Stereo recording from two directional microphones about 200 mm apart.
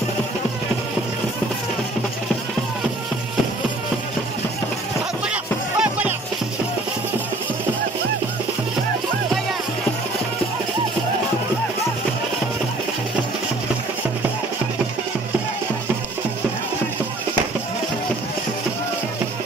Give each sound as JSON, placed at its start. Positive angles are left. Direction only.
{"t": 5.3, "sound": "music", "side_deg": -5}